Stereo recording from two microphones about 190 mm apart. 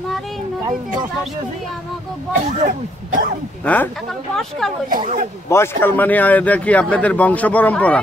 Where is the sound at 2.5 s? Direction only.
40° right (ahead or behind).